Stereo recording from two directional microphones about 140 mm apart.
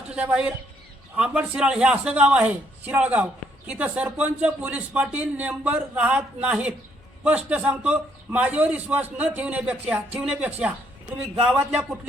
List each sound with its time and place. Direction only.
0.1 s a man's voice: 5° right (ahead or behind)